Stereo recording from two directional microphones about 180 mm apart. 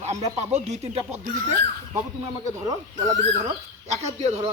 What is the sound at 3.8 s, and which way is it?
Speech, 35° right (ahead or behind).